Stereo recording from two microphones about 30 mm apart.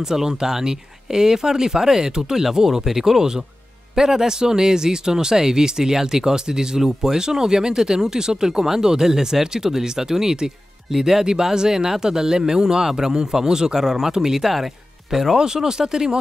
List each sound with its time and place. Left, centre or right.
0.1 s speech: centre